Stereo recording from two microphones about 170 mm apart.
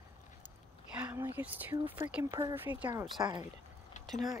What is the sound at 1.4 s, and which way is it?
Speech, 10° right (ahead or behind).